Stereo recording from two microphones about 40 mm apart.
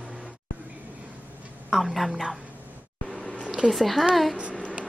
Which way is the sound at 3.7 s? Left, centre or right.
Centre.